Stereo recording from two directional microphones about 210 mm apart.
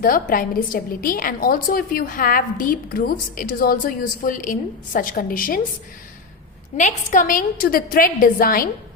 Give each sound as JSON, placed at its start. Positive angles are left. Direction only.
{"t": 0.0, "sound": "a woman's voice", "side_deg": 40}
{"t": 6.7, "sound": "a woman's voice", "side_deg": 35}